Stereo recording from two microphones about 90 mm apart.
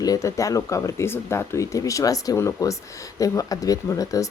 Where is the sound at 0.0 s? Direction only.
40° left (ahead or behind).